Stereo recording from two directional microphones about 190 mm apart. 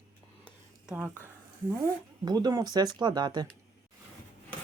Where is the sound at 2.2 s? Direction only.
20° right (ahead or behind).